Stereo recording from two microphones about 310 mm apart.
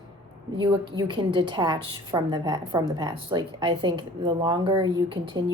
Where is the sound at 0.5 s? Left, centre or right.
Centre.